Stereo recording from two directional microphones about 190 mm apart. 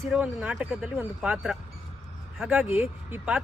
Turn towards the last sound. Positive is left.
turn(degrees=-5)  # may be behind; listen again after turning